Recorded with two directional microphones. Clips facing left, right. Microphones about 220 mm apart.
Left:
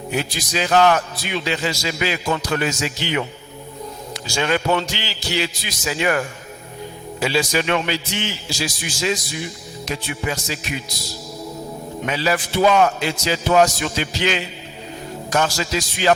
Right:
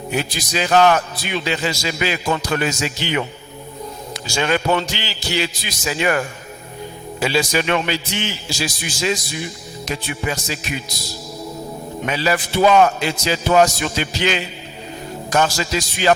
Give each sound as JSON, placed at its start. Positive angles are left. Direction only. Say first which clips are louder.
{"t": 0.2, "sound": "a man's voice", "louder": "right 1 dB", "side_deg": -15}